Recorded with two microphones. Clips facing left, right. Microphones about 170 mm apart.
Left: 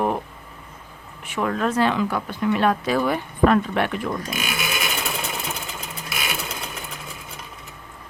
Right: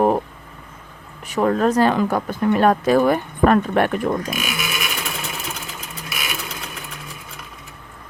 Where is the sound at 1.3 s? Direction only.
40° right (ahead or behind).